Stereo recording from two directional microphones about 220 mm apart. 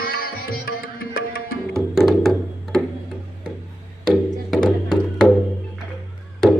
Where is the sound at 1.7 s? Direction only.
Centre (ahead or behind).